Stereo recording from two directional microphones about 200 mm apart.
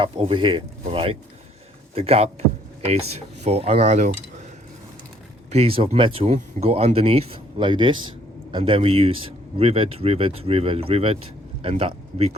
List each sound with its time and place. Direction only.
0.0 s speech: 25° right (ahead or behind)
5.5 s speech: 30° right (ahead or behind)